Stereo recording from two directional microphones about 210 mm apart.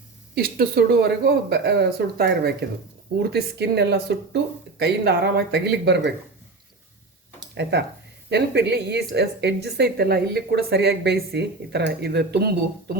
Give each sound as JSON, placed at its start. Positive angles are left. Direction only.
{"t": 0.3, "sound": "a woman's voice", "side_deg": -45}
{"t": 7.5, "sound": "a woman's voice", "side_deg": -55}